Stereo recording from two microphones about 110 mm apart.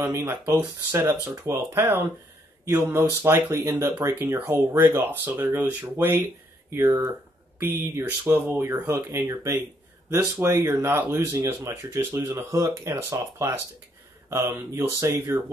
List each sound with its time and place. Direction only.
0.0 s speech: 25° right (ahead or behind)
8.2 s speech: 20° right (ahead or behind)